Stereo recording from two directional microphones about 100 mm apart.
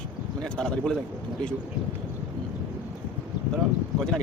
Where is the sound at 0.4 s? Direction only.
10° left (ahead or behind).